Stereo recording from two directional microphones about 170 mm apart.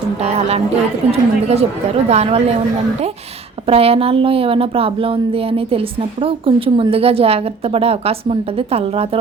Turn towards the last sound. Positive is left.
turn(degrees=-35)  # may be behind; listen again after turning